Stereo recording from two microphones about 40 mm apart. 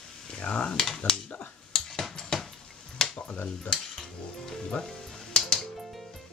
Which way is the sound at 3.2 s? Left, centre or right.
Left.